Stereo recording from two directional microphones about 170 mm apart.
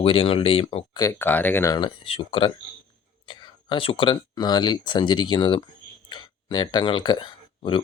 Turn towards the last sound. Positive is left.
turn(degrees=25)  # may be behind; listen again after turning